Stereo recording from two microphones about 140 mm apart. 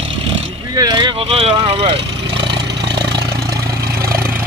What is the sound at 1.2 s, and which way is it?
Speech, 50° right (ahead or behind).